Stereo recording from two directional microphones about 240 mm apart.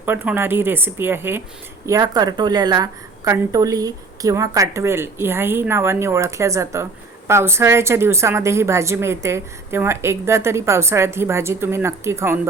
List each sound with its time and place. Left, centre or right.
0.0 s a woman's voice: centre